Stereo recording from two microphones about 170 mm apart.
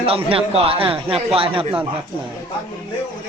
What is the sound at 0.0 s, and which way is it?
A man's voice, 35° right (ahead or behind).